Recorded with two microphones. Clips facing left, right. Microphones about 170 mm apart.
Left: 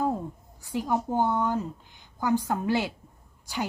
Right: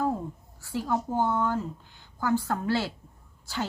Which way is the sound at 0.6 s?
15° left (ahead or behind).